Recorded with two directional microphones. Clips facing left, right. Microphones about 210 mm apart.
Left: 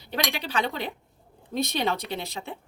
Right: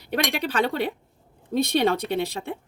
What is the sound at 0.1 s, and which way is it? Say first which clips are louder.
Speech: right 4 dB; 60° right (ahead or behind).